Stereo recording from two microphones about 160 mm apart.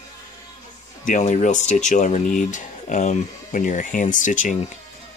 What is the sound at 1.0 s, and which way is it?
Speech, 50° left (ahead or behind).